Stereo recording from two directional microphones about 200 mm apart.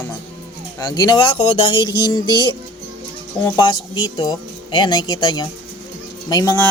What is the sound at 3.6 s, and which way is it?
Speech, 20° left (ahead or behind).